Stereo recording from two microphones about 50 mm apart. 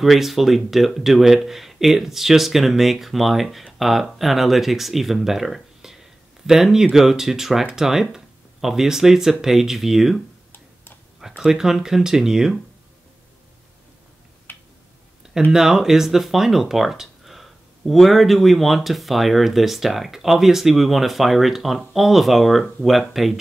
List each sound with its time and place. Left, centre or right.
0.0 s speech: centre
14.5 s a sound: left
15.5 s speech: centre